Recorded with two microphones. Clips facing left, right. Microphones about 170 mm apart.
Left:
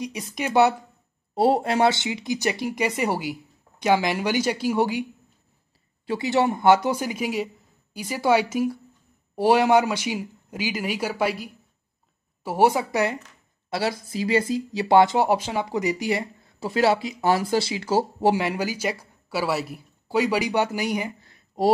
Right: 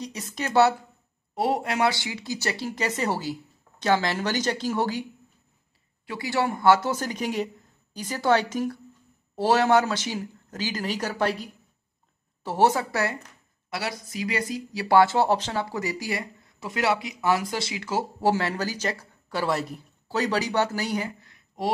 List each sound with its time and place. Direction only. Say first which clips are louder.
0.0 s a man's voice: left 3 dB; 10° left (ahead or behind)
1.3 s a man's voice: left 5 dB; 30° left (ahead or behind); by 5.0 s 15° left (ahead or behind)
6.0 s a man's voice: left 5 dB; 20° left (ahead or behind)
13.7 s speech: left 6 dB; 30° left (ahead or behind)
18.2 s a man's voice: left 2 dB; 15° left (ahead or behind)
21.2 s a sound: left 7 dB; 30° left (ahead or behind)